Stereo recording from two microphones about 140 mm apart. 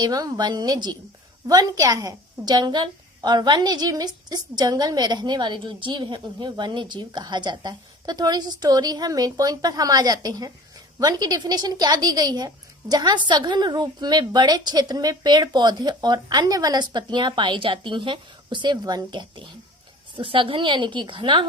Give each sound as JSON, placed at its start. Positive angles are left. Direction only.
{"t": 0.0, "sound": "a woman's voice", "side_deg": -25}